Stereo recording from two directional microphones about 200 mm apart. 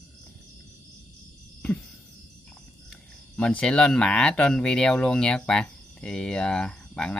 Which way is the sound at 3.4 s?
5° left (ahead or behind).